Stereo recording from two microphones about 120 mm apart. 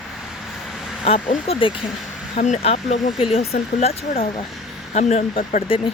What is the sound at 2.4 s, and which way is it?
Speech, 70° left (ahead or behind).